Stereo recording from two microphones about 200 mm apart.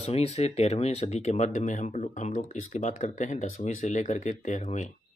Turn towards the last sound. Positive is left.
turn(degrees=35)  # may be behind; listen again after turning